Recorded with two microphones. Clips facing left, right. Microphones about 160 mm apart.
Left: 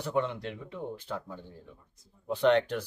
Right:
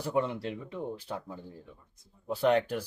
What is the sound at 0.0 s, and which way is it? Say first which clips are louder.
Speech: even; 5° right (ahead or behind).